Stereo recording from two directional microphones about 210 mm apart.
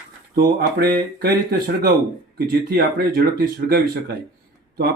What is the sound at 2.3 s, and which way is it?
Speech, 45° right (ahead or behind).